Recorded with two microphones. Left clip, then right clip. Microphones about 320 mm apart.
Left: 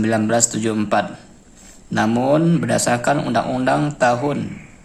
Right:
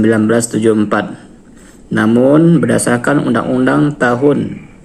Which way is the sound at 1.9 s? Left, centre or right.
Centre.